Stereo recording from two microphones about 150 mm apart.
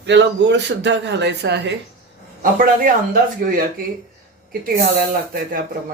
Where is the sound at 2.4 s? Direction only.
70° right (ahead or behind).